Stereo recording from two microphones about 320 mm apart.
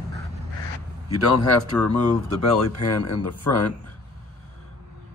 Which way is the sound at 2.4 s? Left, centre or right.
Left.